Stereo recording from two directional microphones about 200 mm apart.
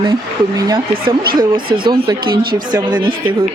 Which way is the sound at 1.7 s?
50° right (ahead or behind).